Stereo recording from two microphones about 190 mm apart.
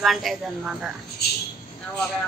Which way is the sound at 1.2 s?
55° left (ahead or behind).